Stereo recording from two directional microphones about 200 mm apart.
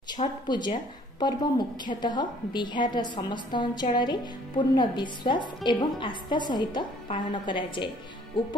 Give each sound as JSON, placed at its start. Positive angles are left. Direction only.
{"t": 0.1, "sound": "a woman's voice", "side_deg": 20}